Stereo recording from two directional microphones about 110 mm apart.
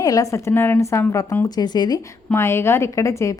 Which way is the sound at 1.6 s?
40° left (ahead or behind).